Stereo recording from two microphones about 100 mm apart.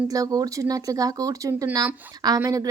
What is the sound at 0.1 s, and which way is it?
Speech, 35° right (ahead or behind).